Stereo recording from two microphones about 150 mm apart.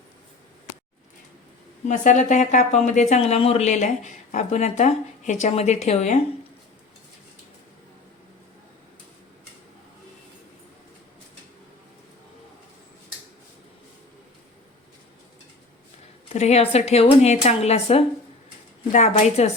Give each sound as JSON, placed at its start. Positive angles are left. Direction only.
{"t": 1.9, "sound": "speech", "side_deg": 55}
{"t": 16.3, "sound": "speech", "side_deg": 45}